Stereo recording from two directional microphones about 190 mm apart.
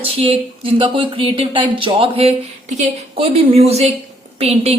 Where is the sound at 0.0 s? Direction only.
30° right (ahead or behind).